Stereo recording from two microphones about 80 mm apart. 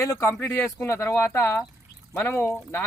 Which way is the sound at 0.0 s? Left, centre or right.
Left.